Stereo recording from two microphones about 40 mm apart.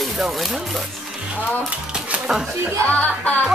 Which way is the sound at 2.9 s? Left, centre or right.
Left.